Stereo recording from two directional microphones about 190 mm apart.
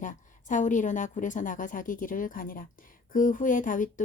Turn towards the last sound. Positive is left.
turn(degrees=45)  # may be behind; listen again after turning